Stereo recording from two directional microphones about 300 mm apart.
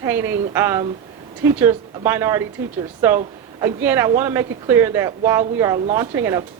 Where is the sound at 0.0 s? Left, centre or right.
Centre.